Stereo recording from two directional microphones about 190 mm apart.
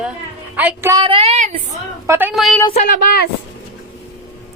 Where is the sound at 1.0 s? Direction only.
30° right (ahead or behind).